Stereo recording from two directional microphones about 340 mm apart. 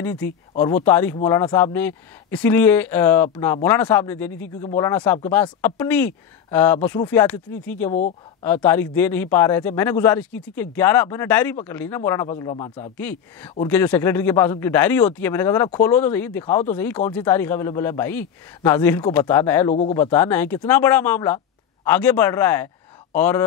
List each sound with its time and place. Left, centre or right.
0.0 s speech: centre
7.9 s speech: left
8.5 s speech: centre